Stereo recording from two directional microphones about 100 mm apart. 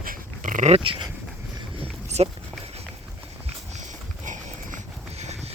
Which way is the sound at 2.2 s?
90° right.